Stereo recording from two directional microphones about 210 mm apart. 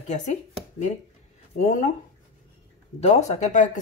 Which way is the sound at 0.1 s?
35° left (ahead or behind).